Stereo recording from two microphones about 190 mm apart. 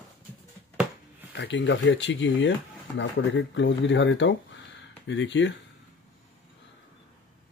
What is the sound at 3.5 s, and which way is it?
Speech, 75° left (ahead or behind).